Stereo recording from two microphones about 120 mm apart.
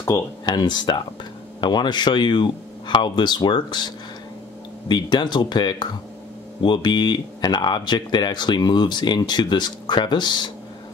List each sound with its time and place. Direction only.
0.5 s speech: 40° left (ahead or behind)